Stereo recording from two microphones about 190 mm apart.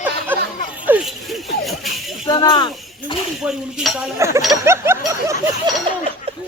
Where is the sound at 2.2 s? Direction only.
20° left (ahead or behind).